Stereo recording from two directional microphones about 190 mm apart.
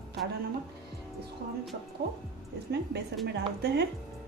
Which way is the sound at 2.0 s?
55° right (ahead or behind).